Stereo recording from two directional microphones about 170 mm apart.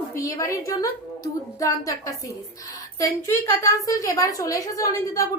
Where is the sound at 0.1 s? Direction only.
20° left (ahead or behind).